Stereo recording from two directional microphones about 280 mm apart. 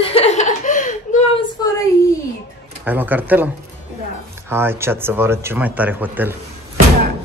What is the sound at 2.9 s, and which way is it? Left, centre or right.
Speech, centre.